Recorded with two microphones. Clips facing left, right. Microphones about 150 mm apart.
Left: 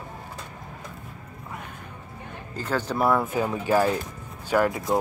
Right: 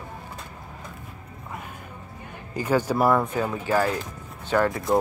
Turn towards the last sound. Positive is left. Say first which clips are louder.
# even
turn(degrees=10)  # may be behind; listen again after turning